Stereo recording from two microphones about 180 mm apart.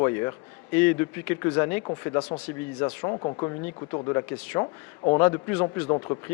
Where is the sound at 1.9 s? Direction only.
30° left (ahead or behind).